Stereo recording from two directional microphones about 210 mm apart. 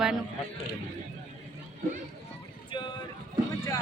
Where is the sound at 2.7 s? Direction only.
20° left (ahead or behind).